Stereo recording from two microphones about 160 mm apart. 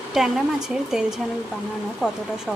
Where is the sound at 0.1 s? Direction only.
5° right (ahead or behind).